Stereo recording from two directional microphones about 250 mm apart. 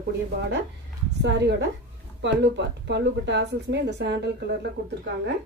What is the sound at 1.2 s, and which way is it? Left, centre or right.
A woman's voice, right.